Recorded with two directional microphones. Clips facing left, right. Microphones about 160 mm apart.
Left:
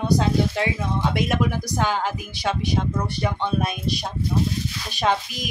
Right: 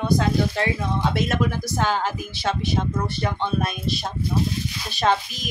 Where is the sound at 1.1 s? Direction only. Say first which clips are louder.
Left 1 dB; 15° left (ahead or behind).